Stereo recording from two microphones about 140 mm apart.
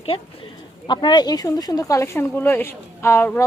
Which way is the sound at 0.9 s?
30° left (ahead or behind).